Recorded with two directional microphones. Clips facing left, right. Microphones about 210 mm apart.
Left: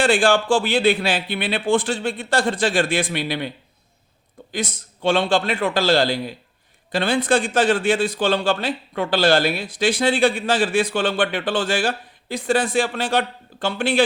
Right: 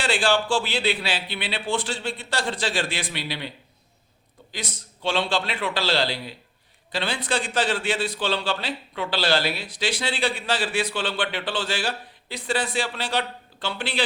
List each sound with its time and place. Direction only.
0.0 s a man's voice: 50° left (ahead or behind)
4.5 s a man's voice: 50° left (ahead or behind)